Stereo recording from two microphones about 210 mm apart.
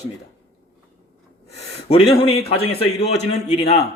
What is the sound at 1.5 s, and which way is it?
A man's voice, 30° left (ahead or behind).